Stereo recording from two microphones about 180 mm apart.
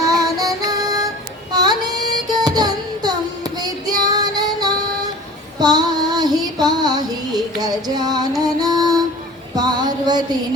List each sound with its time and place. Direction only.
0.0 s music: 20° right (ahead or behind)
1.5 s child singing: 25° right (ahead or behind)
8.4 s music: 20° right (ahead or behind)
9.6 s a sound: 25° right (ahead or behind)